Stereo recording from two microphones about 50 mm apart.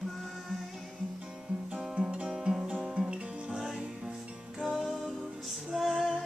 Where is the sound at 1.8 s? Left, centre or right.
Centre.